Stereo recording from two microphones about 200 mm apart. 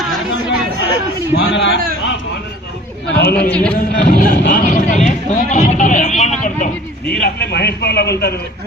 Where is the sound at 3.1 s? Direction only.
50° left (ahead or behind).